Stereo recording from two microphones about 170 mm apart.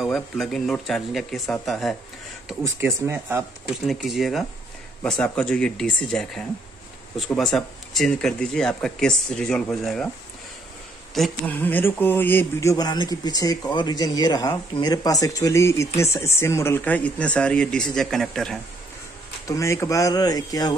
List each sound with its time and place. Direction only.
0.0 s speech: centre (ahead or behind)
2.6 s speech: 15° right (ahead or behind)
3.8 s speech: centre (ahead or behind)
11.1 s speech: 5° left (ahead or behind)
19.4 s speech: 20° left (ahead or behind)